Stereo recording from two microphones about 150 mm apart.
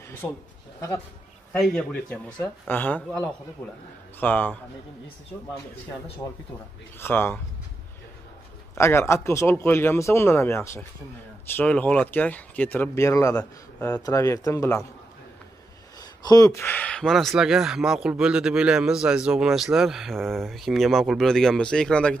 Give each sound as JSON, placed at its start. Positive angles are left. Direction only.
{"t": 0.2, "sound": "a man's voice", "side_deg": 0}
{"t": 1.5, "sound": "speech", "side_deg": 5}
{"t": 4.2, "sound": "speech", "side_deg": 10}
{"t": 7.0, "sound": "speech", "side_deg": 15}
{"t": 8.7, "sound": "speech", "side_deg": 20}
{"t": 16.0, "sound": "a man's voice", "side_deg": 25}